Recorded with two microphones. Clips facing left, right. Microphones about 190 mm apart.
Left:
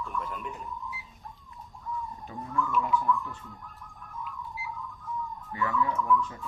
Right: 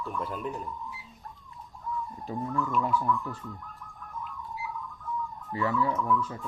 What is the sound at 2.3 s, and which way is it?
Speech, 35° right (ahead or behind).